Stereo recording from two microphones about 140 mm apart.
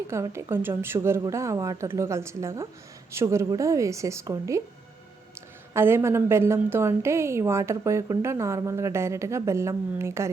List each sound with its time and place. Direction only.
0.1 s a woman's voice: 20° right (ahead or behind)
5.7 s a woman's voice: 20° right (ahead or behind)